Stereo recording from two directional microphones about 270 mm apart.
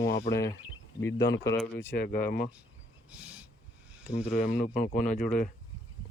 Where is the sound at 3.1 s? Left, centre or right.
Centre.